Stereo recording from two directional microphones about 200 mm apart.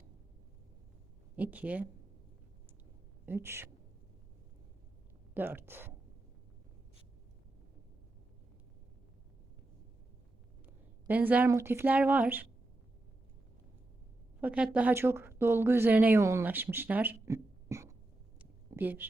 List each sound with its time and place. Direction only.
1.4 s speech: 10° right (ahead or behind)
3.2 s speech: 10° right (ahead or behind)
5.3 s speech: 10° right (ahead or behind)
11.0 s speech: 10° right (ahead or behind)
14.4 s speech: 5° right (ahead or behind)
18.3 s a sound: 10° right (ahead or behind)